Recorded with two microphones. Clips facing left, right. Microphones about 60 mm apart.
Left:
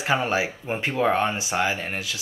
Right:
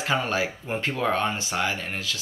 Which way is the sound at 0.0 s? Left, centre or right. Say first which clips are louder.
Left 2 dB; centre.